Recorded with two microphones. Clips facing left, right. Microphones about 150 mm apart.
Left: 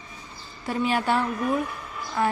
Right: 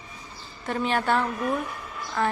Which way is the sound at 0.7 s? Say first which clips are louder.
Left 1 dB; 5° left (ahead or behind).